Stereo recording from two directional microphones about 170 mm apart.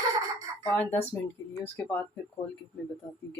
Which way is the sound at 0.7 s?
10° left (ahead or behind).